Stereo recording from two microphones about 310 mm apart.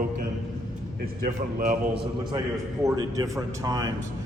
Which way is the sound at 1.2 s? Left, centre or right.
Right.